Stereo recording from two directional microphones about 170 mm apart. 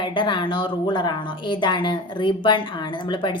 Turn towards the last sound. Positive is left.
turn(degrees=25)  # may be behind; listen again after turning